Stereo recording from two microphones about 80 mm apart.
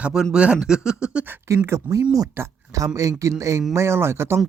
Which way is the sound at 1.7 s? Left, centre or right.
Right.